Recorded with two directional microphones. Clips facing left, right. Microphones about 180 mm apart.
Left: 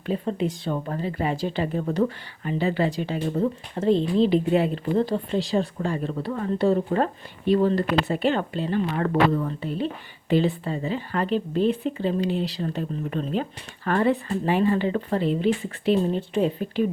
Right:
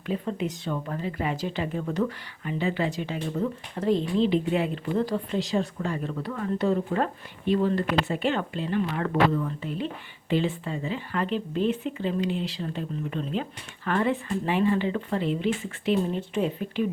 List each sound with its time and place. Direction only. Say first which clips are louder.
0.0 s speech: left 3 dB; 35° left (ahead or behind)